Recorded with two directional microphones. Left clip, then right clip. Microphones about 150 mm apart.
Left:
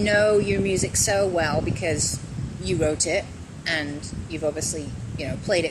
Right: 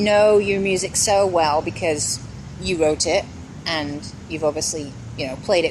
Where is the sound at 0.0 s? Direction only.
20° right (ahead or behind).